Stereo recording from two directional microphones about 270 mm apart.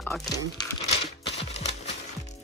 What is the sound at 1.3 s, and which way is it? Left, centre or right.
Music, left.